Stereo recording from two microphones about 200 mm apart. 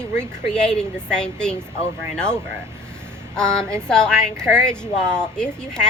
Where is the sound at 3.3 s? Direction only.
5° left (ahead or behind).